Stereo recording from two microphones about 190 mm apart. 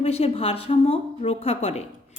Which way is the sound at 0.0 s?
30° left (ahead or behind).